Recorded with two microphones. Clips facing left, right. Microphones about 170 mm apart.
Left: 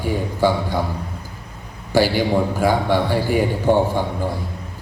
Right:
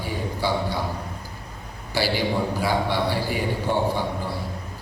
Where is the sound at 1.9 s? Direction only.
45° left (ahead or behind).